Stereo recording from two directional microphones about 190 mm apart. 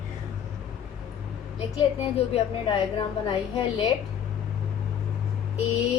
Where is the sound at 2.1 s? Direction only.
30° left (ahead or behind).